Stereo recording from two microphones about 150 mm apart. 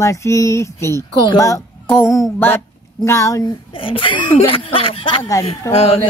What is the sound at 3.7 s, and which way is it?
Speech, 35° left (ahead or behind).